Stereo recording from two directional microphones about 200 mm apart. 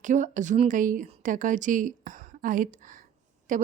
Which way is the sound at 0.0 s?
40° right (ahead or behind).